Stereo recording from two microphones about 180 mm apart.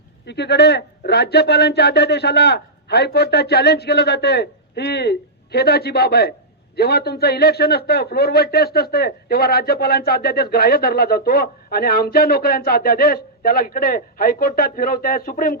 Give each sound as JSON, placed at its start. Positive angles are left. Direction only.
{"t": 0.3, "sound": "a man's voice", "side_deg": 70}